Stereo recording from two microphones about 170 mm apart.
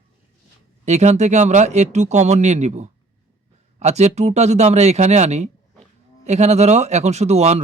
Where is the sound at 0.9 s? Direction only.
40° right (ahead or behind).